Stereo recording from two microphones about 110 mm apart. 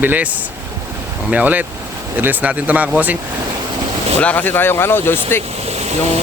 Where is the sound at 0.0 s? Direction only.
15° right (ahead or behind).